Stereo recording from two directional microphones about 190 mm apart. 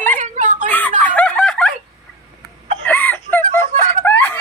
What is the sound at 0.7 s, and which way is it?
Snicker, 10° left (ahead or behind).